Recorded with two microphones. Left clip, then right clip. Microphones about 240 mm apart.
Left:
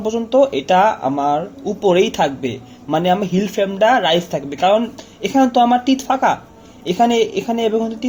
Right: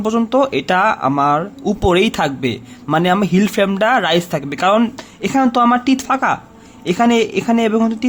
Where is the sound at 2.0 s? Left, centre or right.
Right.